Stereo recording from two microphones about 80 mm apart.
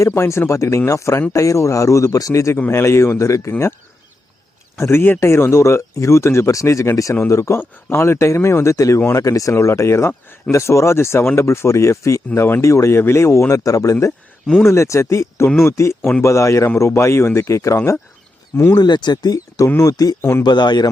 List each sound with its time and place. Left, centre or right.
0.0 s speech: left
2.6 s speech: left
4.8 s speech: left
12.3 s speech: left
18.8 s speech: left
20.4 s speech: left